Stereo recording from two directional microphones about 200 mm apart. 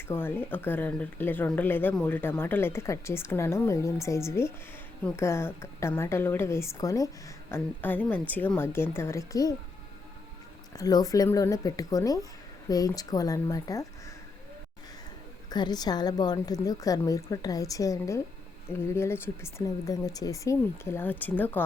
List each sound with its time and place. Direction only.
0.1 s speech: 10° left (ahead or behind)
10.8 s speech: 20° left (ahead or behind)
15.4 s speech: 20° left (ahead or behind)